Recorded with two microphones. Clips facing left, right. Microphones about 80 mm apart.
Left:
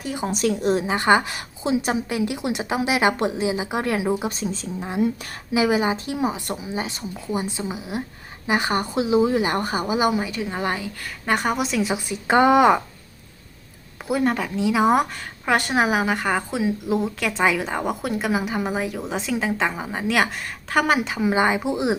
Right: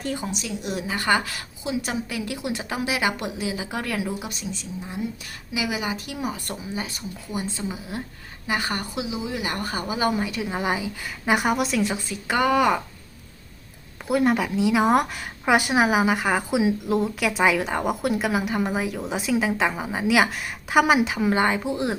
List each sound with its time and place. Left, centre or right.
0.0 s speech: centre
0.3 s speech: left
0.7 s a woman's voice: left
4.8 s speech: left
5.3 s a woman's voice: left
9.0 s a woman's voice: left
9.4 s a woman's voice: left
10.1 s a woman's voice: centre
11.9 s a woman's voice: centre
14.1 s a woman's voice: centre
16.8 s a woman's voice: centre